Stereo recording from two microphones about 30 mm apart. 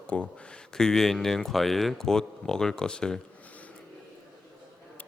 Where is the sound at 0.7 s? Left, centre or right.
Centre.